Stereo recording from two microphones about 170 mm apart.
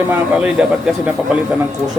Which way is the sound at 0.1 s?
5° right (ahead or behind).